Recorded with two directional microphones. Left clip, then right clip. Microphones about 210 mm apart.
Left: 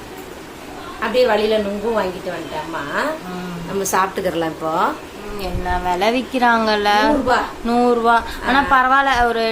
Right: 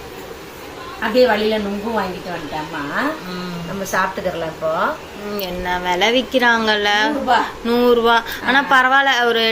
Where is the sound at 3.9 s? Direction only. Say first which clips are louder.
Left 1 dB; 55° left (ahead or behind).